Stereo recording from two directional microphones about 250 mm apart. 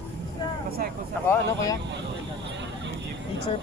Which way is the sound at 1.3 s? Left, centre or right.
Centre.